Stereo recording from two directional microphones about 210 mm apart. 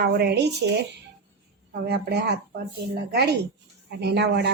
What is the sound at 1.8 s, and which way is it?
A woman's voice, 50° right (ahead or behind).